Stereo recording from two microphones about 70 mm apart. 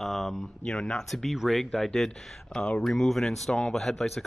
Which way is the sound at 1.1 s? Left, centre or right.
Centre.